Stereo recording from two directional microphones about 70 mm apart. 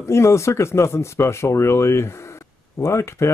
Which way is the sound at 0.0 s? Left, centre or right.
Left.